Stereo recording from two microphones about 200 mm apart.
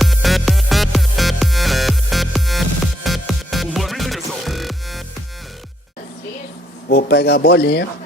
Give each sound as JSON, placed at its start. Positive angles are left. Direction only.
{"t": 0.0, "sound": "music", "side_deg": 0}
{"t": 6.8, "sound": "speech", "side_deg": 55}